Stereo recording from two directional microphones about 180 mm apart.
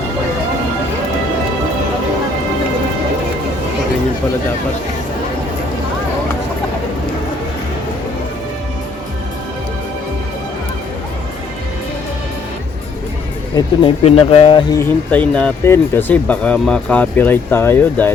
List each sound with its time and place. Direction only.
13.8 s speech: 30° left (ahead or behind)
14.7 s speech: 10° left (ahead or behind)